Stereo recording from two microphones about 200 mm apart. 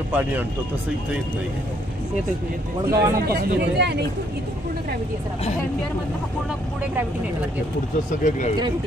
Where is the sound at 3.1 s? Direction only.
50° right (ahead or behind).